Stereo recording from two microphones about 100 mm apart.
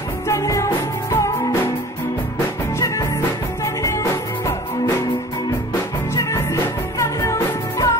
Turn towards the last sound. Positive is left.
turn(degrees=30)  # may be behind; listen again after turning